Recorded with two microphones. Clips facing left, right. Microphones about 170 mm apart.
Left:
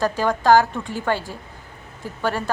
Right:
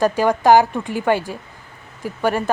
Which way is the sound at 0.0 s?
20° right (ahead or behind).